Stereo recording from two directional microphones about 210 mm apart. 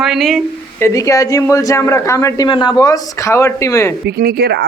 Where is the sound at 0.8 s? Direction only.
15° left (ahead or behind).